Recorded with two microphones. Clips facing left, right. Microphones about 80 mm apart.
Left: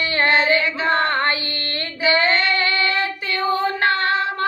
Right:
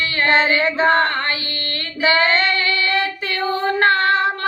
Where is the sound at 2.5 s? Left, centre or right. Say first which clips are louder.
Even; left.